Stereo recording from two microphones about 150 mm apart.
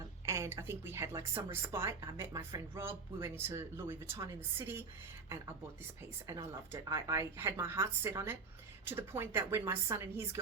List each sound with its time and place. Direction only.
0.3 s a woman's voice: 20° right (ahead or behind)
6.2 s a woman's voice: 25° right (ahead or behind)